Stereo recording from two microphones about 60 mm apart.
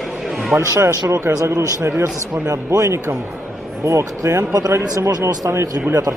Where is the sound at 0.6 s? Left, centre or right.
Right.